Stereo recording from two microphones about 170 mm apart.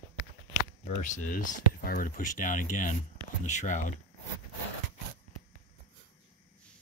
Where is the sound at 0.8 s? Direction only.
45° left (ahead or behind).